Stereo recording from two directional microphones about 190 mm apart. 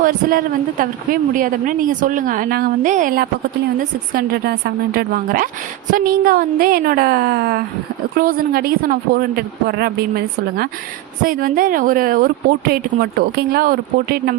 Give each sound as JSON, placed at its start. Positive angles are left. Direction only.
{"t": 0.0, "sound": "speech", "side_deg": -50}